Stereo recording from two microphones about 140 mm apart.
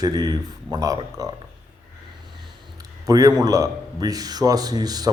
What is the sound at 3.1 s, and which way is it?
A man's voice, 25° right (ahead or behind).